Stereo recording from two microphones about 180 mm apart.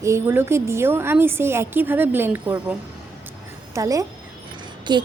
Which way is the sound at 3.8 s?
20° right (ahead or behind).